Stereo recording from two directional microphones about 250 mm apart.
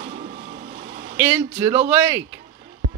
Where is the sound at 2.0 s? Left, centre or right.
Centre.